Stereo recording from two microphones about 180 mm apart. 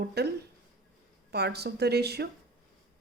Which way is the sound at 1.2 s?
65° right (ahead or behind).